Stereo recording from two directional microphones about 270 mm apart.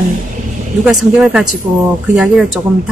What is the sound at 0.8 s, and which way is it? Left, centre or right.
Speech, centre.